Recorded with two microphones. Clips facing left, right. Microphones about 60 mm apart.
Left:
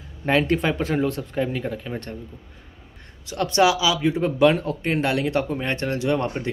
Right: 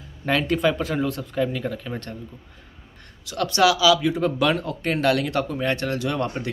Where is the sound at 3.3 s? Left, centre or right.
Left.